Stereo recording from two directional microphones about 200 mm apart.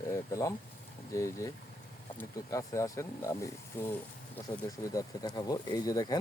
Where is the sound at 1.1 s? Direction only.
15° left (ahead or behind).